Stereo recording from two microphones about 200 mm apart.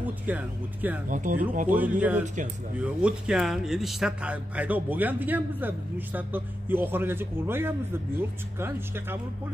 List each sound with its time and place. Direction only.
0.0 s a man's voice: 10° right (ahead or behind)
1.0 s speech: 40° right (ahead or behind)
1.7 s a man's voice: 10° right (ahead or behind)